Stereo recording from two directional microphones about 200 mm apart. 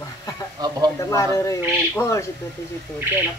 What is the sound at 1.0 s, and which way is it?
Speech, 15° left (ahead or behind).